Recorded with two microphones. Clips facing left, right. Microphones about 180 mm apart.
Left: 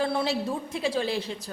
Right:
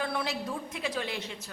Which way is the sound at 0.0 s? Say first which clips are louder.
Left 6 dB; 30° left (ahead or behind).